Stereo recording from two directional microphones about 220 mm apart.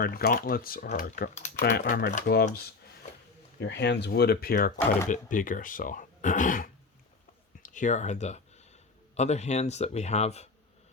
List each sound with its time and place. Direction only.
0.0 s speech: 45° left (ahead or behind)
1.6 s speech: 50° left (ahead or behind); by 10.5 s 30° left (ahead or behind)